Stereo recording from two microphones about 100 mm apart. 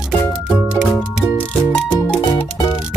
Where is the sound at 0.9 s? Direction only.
15° left (ahead or behind).